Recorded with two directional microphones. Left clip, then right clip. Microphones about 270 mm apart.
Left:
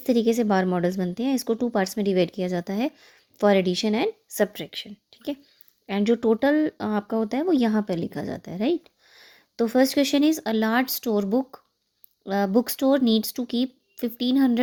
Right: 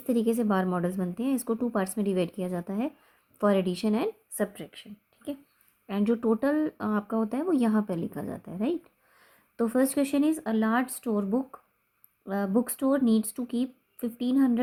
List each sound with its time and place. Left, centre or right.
0.0 s speech: left